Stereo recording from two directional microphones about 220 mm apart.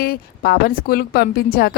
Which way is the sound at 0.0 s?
45° left (ahead or behind).